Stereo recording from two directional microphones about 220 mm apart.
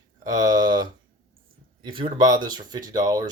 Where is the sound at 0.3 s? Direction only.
20° right (ahead or behind).